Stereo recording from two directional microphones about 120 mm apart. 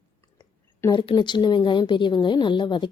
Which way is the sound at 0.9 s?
40° left (ahead or behind).